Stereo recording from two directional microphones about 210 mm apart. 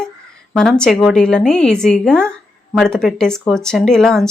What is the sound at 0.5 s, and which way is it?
A woman's voice, 5° left (ahead or behind).